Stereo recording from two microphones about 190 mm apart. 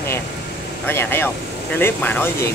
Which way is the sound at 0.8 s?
10° left (ahead or behind).